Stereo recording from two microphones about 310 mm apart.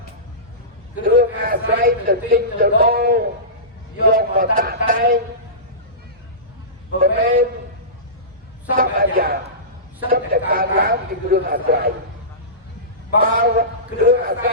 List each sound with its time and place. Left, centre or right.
1.0 s a man's voice: right
7.0 s a man's voice: right
8.7 s a man's voice: right
13.2 s a man's voice: right